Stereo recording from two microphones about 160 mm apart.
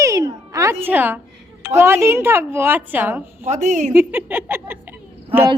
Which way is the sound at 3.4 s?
50° right (ahead or behind).